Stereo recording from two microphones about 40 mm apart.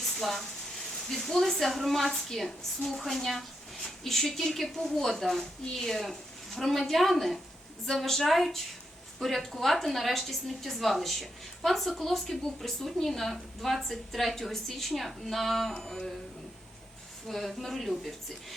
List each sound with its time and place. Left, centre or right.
0.0 s a woman's voice: centre
17.2 s a woman's voice: centre